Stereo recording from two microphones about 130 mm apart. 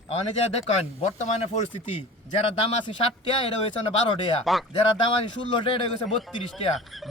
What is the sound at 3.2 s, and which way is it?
Speech, 40° left (ahead or behind).